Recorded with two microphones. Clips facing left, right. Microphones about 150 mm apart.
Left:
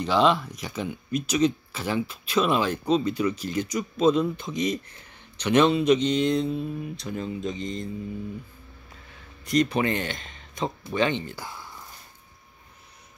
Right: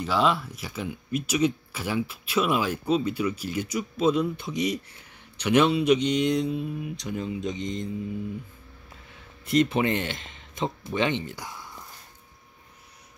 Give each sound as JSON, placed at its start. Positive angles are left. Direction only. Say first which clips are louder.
{"t": 0.0, "sound": "speech", "louder": "left 3 dB", "side_deg": -5}
{"t": 9.5, "sound": "speech", "louder": "right 1 dB", "side_deg": -25}